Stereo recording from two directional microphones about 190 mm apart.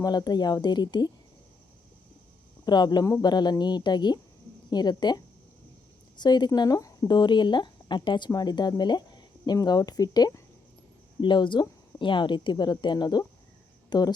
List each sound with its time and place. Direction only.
0.0 s speech: 20° left (ahead or behind)
2.6 s speech: 20° left (ahead or behind)